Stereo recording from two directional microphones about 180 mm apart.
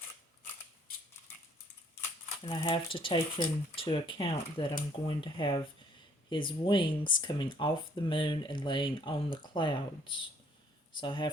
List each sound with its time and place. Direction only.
2.4 s speech: 25° left (ahead or behind)